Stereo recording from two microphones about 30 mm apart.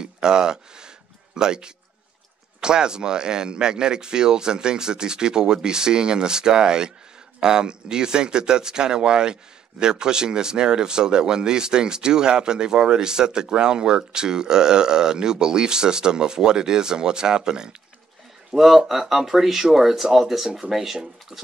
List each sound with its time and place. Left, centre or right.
0.0 s a sound: right
2.6 s speech: right
18.5 s speech: centre